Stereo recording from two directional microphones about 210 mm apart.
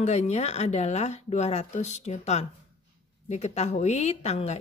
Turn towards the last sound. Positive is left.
turn(degrees=30)  # may be behind; listen again after turning